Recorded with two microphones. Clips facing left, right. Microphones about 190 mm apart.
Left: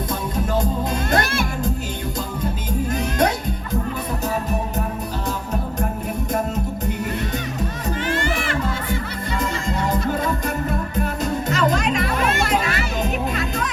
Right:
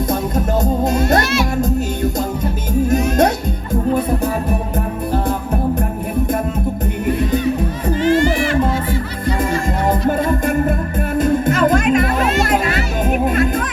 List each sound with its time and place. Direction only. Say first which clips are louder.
0.6 s speech: right 7 dB; 45° right (ahead or behind)
2.9 s music: right 6 dB; 45° right (ahead or behind)
8.0 s a sound: right 11 dB; 55° left (ahead or behind)
9.4 s music: right 4 dB; 50° right (ahead or behind)
12.2 s music: right 4 dB; 55° left (ahead or behind)
12.5 s music: right 4 dB; 50° right (ahead or behind)